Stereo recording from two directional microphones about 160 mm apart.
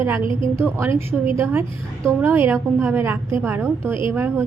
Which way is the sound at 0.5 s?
15° right (ahead or behind).